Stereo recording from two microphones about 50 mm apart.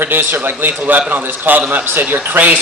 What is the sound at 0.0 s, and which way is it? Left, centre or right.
A man's voice, right.